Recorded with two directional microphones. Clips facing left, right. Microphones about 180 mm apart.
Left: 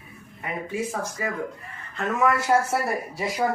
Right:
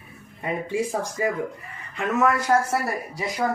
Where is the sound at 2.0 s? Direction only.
Centre (ahead or behind).